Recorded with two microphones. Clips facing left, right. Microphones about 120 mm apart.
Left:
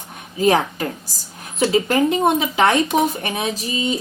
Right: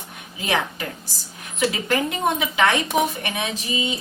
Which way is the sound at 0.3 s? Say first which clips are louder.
Left 8 dB; 40° left (ahead or behind).